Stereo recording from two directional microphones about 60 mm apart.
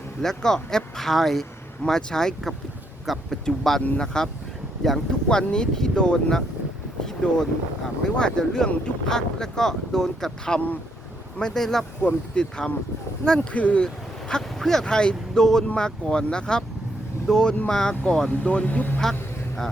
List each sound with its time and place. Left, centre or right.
0.2 s speech: centre
13.8 s speech: centre; by 18.9 s left